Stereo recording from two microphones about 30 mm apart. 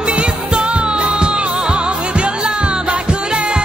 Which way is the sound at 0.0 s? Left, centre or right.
Right.